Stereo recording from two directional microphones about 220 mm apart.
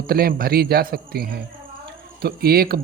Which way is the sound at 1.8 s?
45° right (ahead or behind).